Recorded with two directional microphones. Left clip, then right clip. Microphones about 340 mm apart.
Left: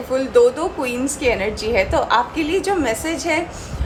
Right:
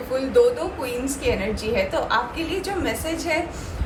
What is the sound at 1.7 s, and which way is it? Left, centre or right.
A woman's voice, centre.